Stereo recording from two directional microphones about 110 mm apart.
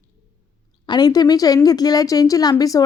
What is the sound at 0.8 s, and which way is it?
A woman's voice, 40° left (ahead or behind).